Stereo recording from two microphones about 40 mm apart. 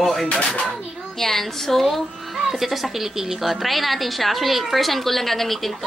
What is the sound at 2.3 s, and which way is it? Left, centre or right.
A woman's voice, centre.